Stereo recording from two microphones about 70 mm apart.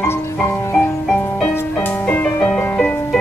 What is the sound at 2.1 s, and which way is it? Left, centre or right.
Music, centre.